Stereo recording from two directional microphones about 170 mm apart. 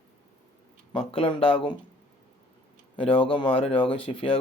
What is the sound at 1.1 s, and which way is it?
Speech, 35° left (ahead or behind).